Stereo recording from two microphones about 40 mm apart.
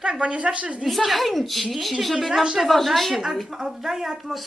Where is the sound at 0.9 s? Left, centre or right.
Centre.